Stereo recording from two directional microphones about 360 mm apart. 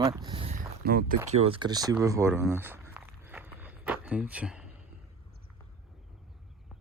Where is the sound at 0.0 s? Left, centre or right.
Centre.